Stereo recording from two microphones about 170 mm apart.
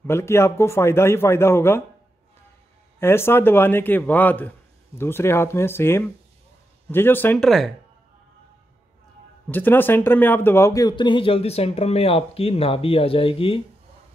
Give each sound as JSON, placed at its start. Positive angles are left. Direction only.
{"t": 0.0, "sound": "a man's voice", "side_deg": 15}
{"t": 3.0, "sound": "a man's voice", "side_deg": 15}
{"t": 7.4, "sound": "speech", "side_deg": 0}
{"t": 9.5, "sound": "speech", "side_deg": 10}